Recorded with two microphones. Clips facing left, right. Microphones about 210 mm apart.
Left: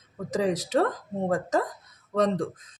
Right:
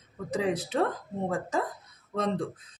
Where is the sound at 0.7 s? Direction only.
50° left (ahead or behind).